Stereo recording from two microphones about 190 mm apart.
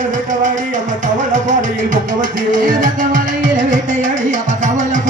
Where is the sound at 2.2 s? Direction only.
45° right (ahead or behind).